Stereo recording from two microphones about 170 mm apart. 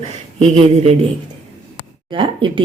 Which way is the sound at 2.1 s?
30° right (ahead or behind).